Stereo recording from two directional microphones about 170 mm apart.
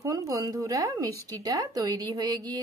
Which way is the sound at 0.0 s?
20° right (ahead or behind).